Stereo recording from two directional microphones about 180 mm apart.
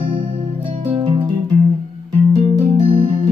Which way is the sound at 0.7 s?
30° right (ahead or behind).